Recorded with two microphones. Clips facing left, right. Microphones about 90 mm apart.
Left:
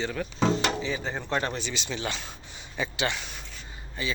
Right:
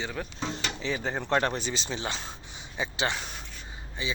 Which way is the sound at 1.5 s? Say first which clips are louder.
Right 1 dB; 40° right (ahead or behind).